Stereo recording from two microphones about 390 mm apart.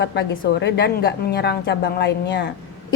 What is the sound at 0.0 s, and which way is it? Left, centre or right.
A woman's voice, left.